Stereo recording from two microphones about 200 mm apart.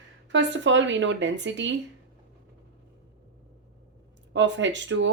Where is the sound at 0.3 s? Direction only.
65° right (ahead or behind).